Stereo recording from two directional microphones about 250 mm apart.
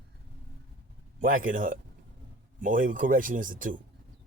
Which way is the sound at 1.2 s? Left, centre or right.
Right.